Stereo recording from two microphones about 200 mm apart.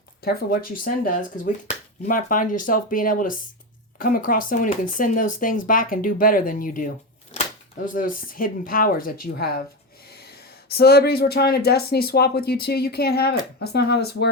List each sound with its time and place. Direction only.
0.2 s speech: 50° left (ahead or behind)
7.3 s a sound: 35° left (ahead or behind)
7.9 s speech: 45° left (ahead or behind)